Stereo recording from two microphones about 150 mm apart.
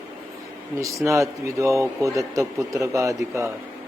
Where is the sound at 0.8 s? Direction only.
20° right (ahead or behind).